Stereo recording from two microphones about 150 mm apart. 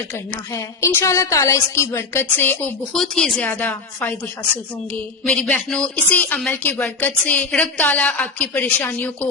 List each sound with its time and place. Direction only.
0.1 s speech: 20° left (ahead or behind)